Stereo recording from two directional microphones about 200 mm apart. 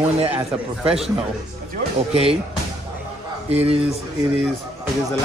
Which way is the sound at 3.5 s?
30° right (ahead or behind).